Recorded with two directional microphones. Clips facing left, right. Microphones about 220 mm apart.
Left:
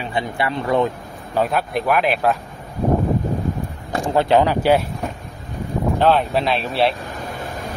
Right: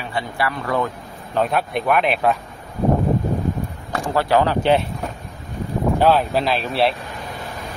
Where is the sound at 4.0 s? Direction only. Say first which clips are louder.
Left 2 dB; 20° left (ahead or behind).